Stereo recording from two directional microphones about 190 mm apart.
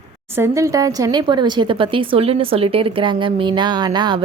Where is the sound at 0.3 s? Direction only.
15° right (ahead or behind).